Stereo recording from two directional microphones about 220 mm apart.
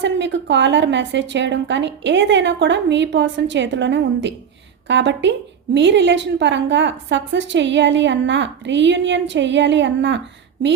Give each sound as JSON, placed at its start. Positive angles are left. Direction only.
{"t": 0.0, "sound": "a woman's voice", "side_deg": -55}